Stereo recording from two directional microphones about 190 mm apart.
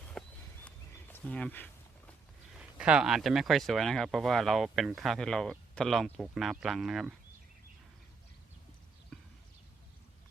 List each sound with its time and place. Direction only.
0.1 s a sound: 5° left (ahead or behind)
1.1 s speech: 5° left (ahead or behind)
2.6 s speech: 5° right (ahead or behind)
9.1 s clip-clop: 5° left (ahead or behind)